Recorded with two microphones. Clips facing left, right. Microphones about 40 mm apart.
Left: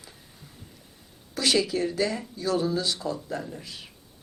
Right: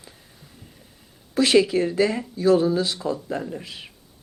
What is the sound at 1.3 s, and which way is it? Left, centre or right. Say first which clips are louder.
Speech: right 7 dB; right.